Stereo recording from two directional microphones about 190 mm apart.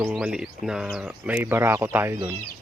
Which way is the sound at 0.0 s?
5° right (ahead or behind).